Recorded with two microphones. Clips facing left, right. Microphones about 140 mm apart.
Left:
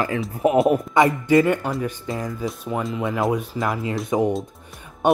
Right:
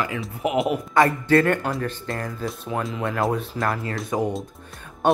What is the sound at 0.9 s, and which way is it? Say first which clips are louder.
Speech: left 1 dB; 15° left (ahead or behind).